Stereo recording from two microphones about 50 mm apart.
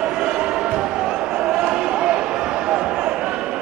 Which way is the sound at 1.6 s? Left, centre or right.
Centre.